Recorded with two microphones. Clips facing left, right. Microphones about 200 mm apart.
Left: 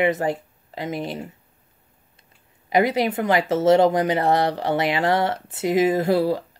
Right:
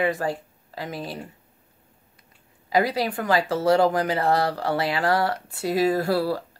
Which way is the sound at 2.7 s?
20° left (ahead or behind).